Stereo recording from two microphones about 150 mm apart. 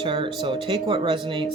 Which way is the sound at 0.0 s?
35° right (ahead or behind).